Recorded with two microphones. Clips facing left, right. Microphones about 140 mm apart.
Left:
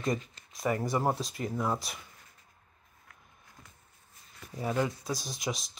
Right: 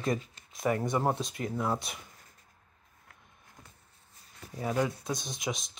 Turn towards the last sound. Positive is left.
turn(degrees=0)  # may be behind; listen again after turning